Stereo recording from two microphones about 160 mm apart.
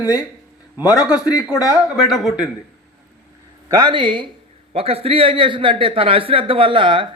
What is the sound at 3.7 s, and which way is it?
A man's voice, 30° right (ahead or behind).